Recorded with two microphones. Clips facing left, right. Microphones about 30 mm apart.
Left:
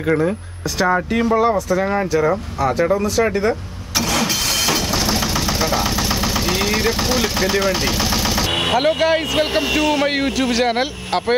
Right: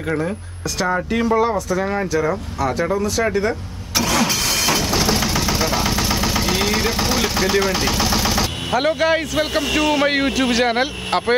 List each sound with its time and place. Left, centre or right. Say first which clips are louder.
0.7 s speech: left 3 dB; centre
4.1 s vehicle: right 1 dB; centre
9.3 s speech: left 2 dB; left
9.7 s speech: even; centre